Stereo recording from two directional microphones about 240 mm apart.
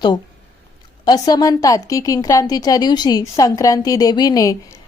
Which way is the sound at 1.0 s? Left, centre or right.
Centre.